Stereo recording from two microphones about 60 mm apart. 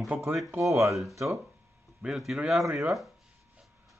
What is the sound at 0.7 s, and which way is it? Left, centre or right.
Speech, right.